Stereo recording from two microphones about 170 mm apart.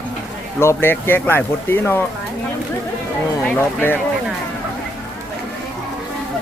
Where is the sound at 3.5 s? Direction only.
10° left (ahead or behind).